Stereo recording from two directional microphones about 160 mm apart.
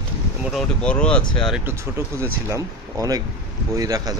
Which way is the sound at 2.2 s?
20° right (ahead or behind).